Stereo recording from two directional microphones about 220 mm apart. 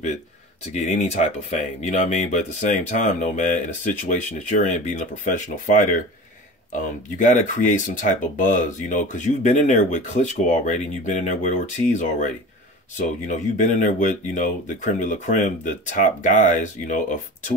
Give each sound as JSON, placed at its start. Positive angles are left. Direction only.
{"t": 0.7, "sound": "speech", "side_deg": 30}
{"t": 7.2, "sound": "speech", "side_deg": 35}